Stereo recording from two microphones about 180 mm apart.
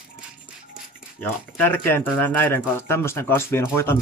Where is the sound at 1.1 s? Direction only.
10° left (ahead or behind).